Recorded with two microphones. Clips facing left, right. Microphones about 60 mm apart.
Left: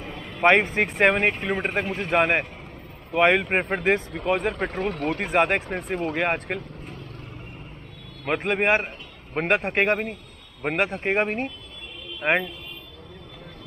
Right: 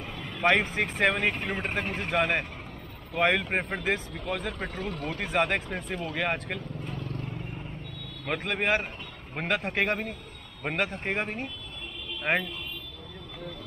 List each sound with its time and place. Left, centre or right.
0.3 s speech: left
5.2 s speech: left
8.3 s speech: left
10.6 s a man's voice: left
11.1 s speech: left
12.2 s speech: left